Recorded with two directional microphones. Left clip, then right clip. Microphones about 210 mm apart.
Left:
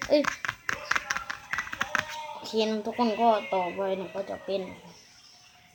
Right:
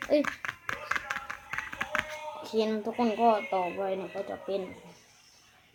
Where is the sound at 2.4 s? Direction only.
5° right (ahead or behind).